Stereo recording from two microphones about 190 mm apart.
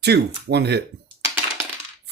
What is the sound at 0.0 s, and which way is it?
Speech, 60° right (ahead or behind).